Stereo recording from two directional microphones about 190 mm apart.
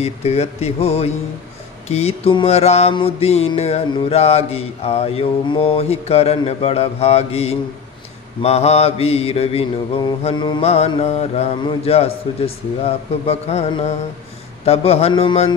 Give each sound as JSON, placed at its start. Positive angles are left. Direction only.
{"t": 0.0, "sound": "mantra", "side_deg": 35}